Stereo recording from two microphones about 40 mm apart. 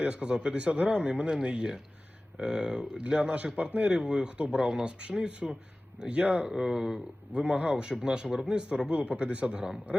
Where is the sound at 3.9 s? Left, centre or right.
Right.